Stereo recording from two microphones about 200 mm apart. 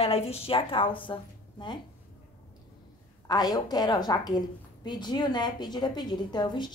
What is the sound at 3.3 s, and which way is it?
A woman's voice, 20° left (ahead or behind).